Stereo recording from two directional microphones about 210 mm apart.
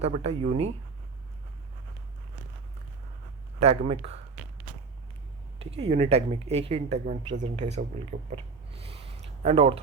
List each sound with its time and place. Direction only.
0.0 s speech: 30° right (ahead or behind)
3.6 s speech: 30° right (ahead or behind)
5.5 s speech: 30° right (ahead or behind)
8.7 s a sound: 25° right (ahead or behind)